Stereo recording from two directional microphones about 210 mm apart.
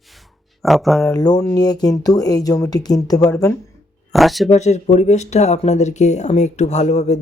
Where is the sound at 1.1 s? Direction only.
20° left (ahead or behind).